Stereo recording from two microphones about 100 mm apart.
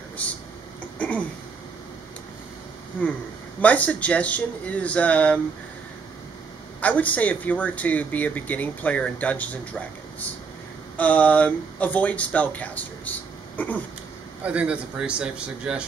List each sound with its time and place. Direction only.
0.9 s a sound: 15° left (ahead or behind)
3.6 s speech: 15° left (ahead or behind)
6.8 s speech: 15° left (ahead or behind)
11.0 s speech: 15° left (ahead or behind)
14.4 s a man's voice: 15° right (ahead or behind)